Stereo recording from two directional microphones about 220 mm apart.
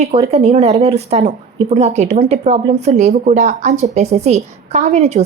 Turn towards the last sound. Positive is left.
turn(degrees=-30)  # may be behind; listen again after turning